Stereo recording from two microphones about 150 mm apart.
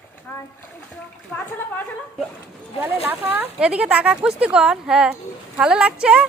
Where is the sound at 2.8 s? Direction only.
10° right (ahead or behind).